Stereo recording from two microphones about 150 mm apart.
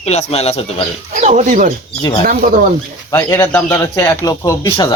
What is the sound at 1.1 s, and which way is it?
Speech, 55° right (ahead or behind).